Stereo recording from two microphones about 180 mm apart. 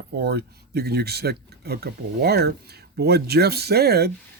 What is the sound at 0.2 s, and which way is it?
Speech, 65° right (ahead or behind).